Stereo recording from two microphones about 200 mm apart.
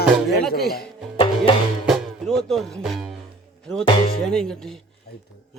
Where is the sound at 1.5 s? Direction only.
25° left (ahead or behind).